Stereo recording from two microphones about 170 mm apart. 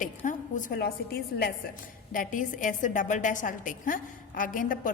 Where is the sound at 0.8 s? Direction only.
70° left (ahead or behind).